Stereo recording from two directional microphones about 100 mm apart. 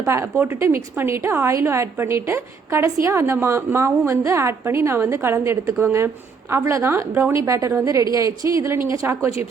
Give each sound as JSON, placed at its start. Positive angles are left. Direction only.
{"t": 0.0, "sound": "a woman's voice", "side_deg": -25}